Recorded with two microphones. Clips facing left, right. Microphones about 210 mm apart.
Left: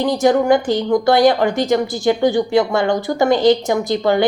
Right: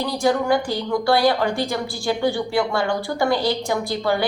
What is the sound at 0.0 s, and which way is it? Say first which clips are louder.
A woman's voice: left 6 dB; 20° left (ahead or behind).